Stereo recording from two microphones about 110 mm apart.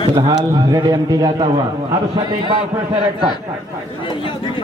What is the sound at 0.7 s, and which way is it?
Speech, 35° right (ahead or behind).